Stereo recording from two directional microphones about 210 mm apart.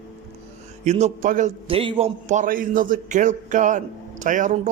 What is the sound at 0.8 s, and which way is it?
Speech, 35° right (ahead or behind).